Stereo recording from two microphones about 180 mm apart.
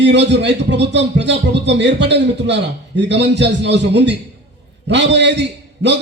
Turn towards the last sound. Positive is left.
turn(degrees=-75)  # may be behind; listen again after turning